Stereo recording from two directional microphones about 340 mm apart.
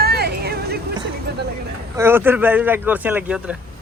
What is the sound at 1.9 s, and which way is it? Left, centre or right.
Speech, centre.